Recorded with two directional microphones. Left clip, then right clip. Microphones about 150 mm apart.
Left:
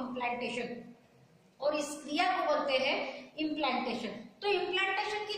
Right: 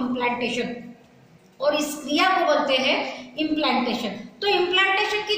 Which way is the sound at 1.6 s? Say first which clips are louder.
Right 10 dB; 15° left (ahead or behind).